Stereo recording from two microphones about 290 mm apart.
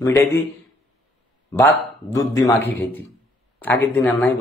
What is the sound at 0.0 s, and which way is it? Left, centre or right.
Speech, centre.